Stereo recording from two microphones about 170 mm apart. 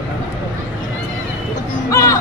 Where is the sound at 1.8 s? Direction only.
20° left (ahead or behind).